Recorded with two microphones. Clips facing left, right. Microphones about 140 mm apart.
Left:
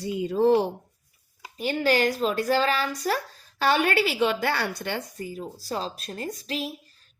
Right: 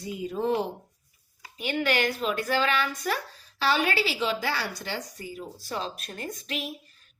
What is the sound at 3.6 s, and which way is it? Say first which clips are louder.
A woman's voice: left 3 dB; 55° left (ahead or behind).